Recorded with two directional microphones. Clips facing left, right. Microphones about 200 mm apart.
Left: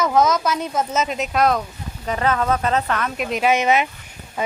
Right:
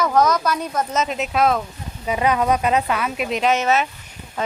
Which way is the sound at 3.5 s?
15° left (ahead or behind).